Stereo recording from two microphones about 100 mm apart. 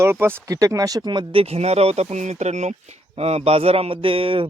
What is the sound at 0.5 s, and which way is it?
Speech, 35° right (ahead or behind).